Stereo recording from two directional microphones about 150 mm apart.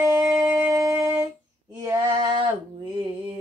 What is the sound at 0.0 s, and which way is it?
Music, 20° right (ahead or behind).